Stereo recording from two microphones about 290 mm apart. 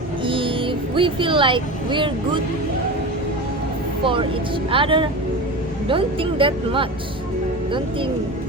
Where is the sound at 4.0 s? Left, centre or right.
Centre.